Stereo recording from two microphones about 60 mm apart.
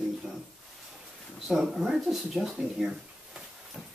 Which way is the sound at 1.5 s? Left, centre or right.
Centre.